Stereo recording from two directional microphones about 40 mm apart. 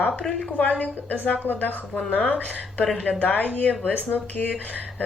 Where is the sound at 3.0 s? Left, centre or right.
Left.